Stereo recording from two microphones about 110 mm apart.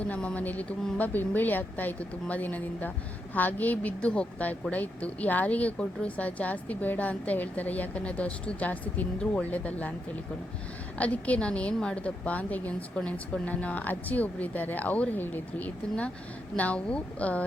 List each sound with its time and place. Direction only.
0.0 s speech: 10° left (ahead or behind)
10.9 s speech: 15° left (ahead or behind)